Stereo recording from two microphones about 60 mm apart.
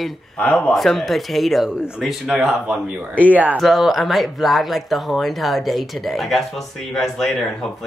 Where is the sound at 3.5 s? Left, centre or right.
Centre.